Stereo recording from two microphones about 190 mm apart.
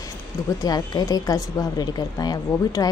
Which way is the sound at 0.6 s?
20° left (ahead or behind).